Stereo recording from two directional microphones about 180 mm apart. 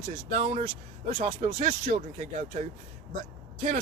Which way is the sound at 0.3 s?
40° right (ahead or behind).